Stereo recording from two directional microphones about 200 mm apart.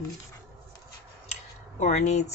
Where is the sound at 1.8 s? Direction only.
35° left (ahead or behind).